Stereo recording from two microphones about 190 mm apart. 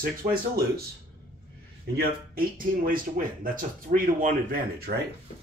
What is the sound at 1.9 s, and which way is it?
A man's voice, 50° right (ahead or behind).